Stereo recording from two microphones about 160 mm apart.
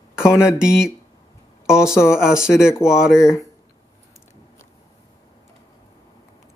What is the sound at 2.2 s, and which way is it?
Speech, 5° right (ahead or behind).